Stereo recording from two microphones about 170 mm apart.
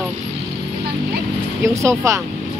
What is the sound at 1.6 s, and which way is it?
Speech, 15° right (ahead or behind).